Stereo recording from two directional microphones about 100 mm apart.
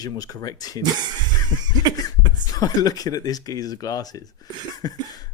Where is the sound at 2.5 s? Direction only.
40° left (ahead or behind).